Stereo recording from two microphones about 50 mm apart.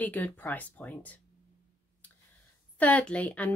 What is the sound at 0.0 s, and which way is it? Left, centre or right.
Speech, left.